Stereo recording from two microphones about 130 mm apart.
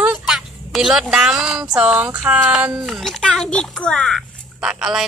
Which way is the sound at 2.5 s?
5° right (ahead or behind).